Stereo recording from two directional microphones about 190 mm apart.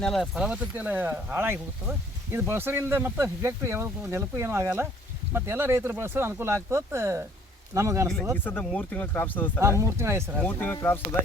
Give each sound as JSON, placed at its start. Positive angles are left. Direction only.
{"t": 0.0, "sound": "speech", "side_deg": 0}
{"t": 8.4, "sound": "speech", "side_deg": 10}
{"t": 9.6, "sound": "speech", "side_deg": -15}
{"t": 10.4, "sound": "speech", "side_deg": 10}